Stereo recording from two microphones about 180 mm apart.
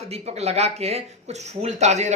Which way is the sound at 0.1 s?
35° right (ahead or behind).